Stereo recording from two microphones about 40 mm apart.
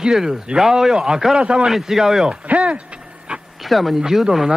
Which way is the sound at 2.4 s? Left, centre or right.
Right.